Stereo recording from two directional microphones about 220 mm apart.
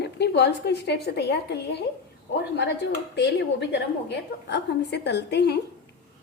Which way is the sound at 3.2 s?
50° left (ahead or behind).